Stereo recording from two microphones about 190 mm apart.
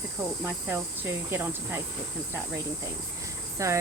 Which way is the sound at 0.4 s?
10° right (ahead or behind).